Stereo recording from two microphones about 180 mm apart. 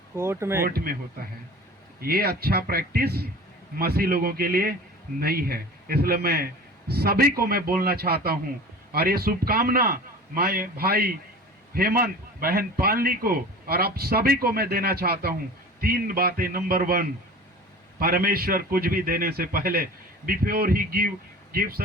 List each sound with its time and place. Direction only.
0.2 s speech: 15° right (ahead or behind)
0.6 s a man's voice: 55° right (ahead or behind)
2.0 s a man's voice: 55° right (ahead or behind)